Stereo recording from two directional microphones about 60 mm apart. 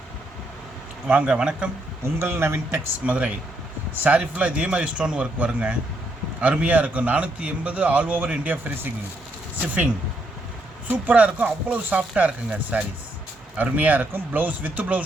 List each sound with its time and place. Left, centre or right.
1.0 s speech: centre
2.0 s speech: right
3.1 s a man's voice: right